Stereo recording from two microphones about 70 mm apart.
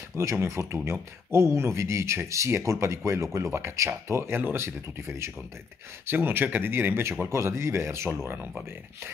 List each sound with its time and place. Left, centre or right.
0.2 s speech: right